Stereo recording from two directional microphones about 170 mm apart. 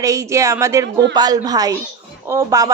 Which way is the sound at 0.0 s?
20° right (ahead or behind).